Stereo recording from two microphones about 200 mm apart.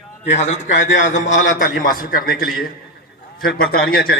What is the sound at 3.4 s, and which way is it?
Speech, 50° left (ahead or behind).